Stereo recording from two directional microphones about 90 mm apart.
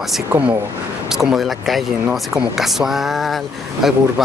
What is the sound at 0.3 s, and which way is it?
Speech, 20° right (ahead or behind).